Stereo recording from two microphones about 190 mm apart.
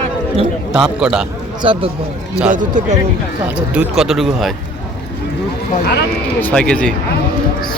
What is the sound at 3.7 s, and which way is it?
Speech, centre (ahead or behind).